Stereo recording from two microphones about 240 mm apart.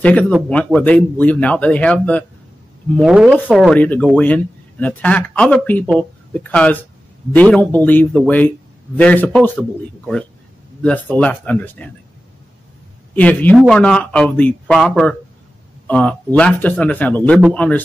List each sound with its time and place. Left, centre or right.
0.0 s a man's voice: centre
13.1 s speech: centre